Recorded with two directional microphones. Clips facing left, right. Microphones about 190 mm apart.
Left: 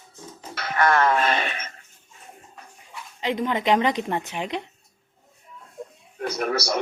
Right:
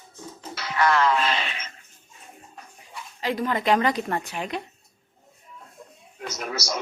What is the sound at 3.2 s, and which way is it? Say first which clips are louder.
A woman's voice: left 1 dB; 20° left (ahead or behind).